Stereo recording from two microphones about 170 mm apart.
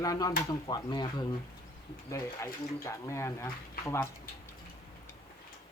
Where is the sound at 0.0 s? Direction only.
20° left (ahead or behind).